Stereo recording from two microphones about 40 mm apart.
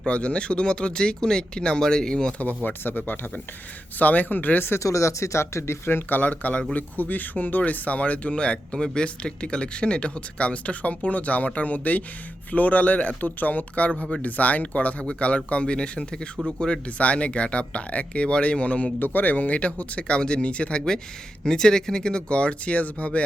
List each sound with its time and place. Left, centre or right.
0.0 s speech: left
2.6 s speech: left
5.2 s speech: left
5.6 s speech: left
13.9 s speech: left
14.3 s speech: left
18.9 s speech: left
21.4 s speech: centre; by 23.2 s left